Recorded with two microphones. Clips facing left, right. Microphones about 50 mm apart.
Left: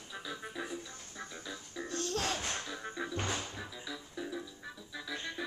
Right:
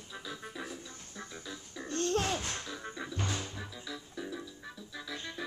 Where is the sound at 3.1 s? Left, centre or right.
Left.